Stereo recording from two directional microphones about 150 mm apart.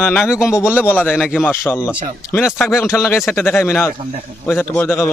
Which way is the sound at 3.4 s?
15° left (ahead or behind).